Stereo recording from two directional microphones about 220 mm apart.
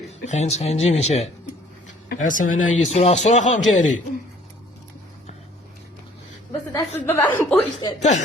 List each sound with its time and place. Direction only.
0.3 s a man's voice: 30° left (ahead or behind)
7.0 s a woman's voice: 10° left (ahead or behind)
7.9 s a man's voice: 30° left (ahead or behind)